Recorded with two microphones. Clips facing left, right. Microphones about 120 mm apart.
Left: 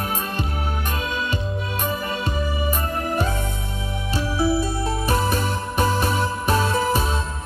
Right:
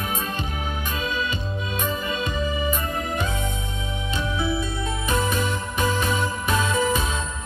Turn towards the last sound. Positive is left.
turn(degrees=45)  # may be behind; listen again after turning